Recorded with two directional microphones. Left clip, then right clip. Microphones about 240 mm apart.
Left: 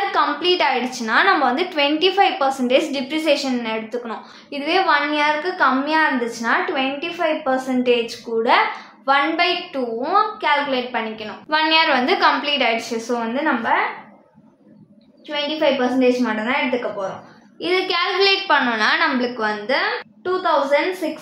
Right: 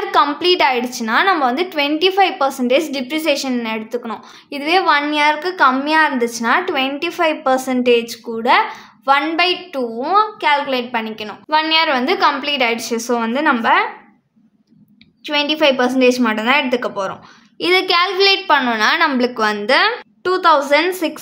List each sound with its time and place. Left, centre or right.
0.1 s a woman's voice: right
15.2 s a woman's voice: right
17.6 s a woman's voice: right